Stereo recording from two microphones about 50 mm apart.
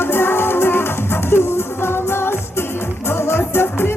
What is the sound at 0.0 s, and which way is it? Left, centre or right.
Music, left.